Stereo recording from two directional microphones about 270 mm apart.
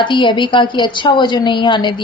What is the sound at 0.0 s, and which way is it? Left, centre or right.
A woman's voice, centre.